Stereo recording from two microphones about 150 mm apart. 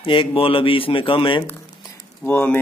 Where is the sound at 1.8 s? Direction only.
15° left (ahead or behind).